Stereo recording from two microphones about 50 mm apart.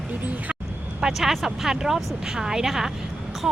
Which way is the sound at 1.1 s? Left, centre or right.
Centre.